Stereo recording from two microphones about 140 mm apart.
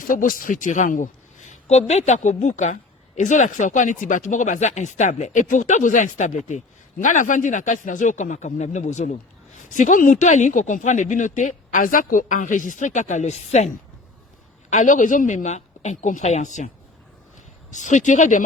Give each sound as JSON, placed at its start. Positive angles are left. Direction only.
{"t": 0.1, "sound": "speech", "side_deg": 75}
{"t": 14.7, "sound": "speech", "side_deg": 65}
{"t": 17.7, "sound": "speech", "side_deg": 65}